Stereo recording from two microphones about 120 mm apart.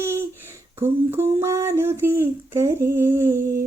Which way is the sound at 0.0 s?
20° right (ahead or behind).